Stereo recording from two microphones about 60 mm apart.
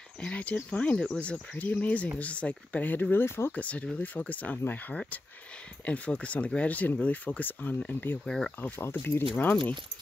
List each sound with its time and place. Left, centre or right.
0.2 s speech: left
3.5 s speech: left
8.3 s speech: centre
8.5 s speech: left